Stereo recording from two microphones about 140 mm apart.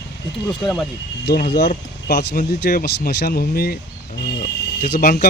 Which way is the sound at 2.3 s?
80° left.